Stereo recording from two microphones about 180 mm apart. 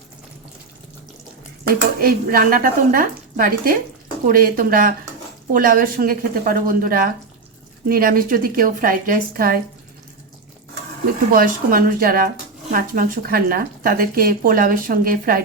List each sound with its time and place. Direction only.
1.6 s speech: 55° right (ahead or behind)
11.0 s speech: 55° right (ahead or behind)